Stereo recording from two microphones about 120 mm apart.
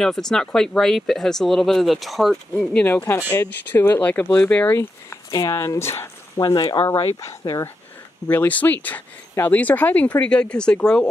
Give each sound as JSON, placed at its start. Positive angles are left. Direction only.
{"t": 0.0, "sound": "speech", "side_deg": 5}
{"t": 5.3, "sound": "speech", "side_deg": 25}
{"t": 6.4, "sound": "speech", "side_deg": 35}
{"t": 8.3, "sound": "speech", "side_deg": 15}